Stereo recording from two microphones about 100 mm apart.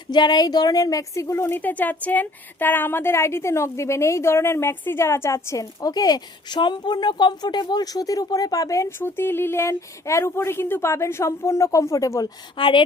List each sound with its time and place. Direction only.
0.1 s a woman's voice: 45° left (ahead or behind)
12.5 s a woman's voice: 55° left (ahead or behind)